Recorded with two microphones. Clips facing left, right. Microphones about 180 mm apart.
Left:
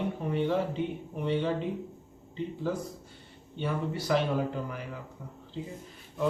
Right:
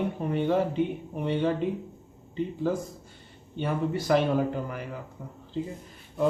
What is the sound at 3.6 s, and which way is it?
Speech, 50° right (ahead or behind).